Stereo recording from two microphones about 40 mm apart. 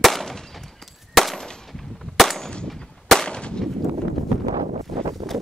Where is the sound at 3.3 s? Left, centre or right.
Left.